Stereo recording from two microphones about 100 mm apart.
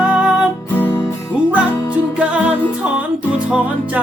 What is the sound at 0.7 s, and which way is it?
Music, 20° left (ahead or behind).